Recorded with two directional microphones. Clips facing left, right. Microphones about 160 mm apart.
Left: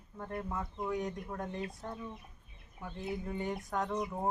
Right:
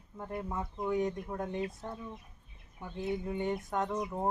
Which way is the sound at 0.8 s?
Centre (ahead or behind).